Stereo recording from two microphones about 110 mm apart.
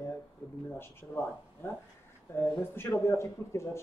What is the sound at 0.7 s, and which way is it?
Speech, 25° left (ahead or behind).